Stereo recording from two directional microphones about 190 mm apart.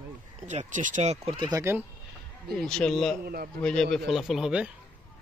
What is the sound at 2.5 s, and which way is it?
Speech, 5° left (ahead or behind).